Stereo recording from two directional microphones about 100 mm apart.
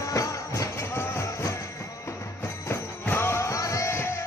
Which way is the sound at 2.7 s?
25° left (ahead or behind).